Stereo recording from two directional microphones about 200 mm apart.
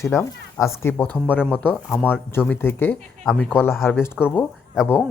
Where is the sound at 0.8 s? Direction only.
10° left (ahead or behind).